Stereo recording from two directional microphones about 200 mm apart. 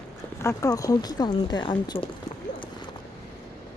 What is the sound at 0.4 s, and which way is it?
Speech, 15° left (ahead or behind).